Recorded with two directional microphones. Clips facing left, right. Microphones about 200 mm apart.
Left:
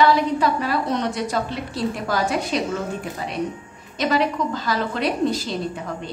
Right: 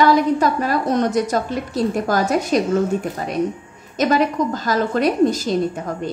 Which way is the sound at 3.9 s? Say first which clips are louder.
Right 4 dB; 45° right (ahead or behind).